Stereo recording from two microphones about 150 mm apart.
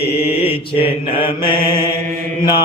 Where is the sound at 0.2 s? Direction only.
40° left (ahead or behind).